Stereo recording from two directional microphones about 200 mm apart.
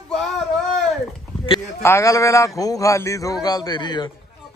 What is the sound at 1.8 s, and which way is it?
A man's voice, 15° left (ahead or behind).